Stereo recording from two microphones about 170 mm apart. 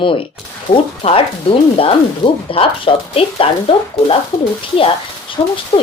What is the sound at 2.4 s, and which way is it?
Speech, 30° left (ahead or behind).